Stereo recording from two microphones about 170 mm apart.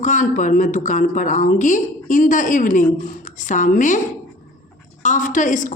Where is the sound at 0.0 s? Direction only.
45° left (ahead or behind).